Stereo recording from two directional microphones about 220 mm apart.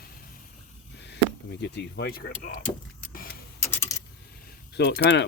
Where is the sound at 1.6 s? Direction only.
50° left (ahead or behind).